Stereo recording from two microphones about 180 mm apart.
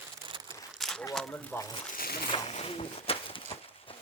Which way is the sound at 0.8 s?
5° left (ahead or behind).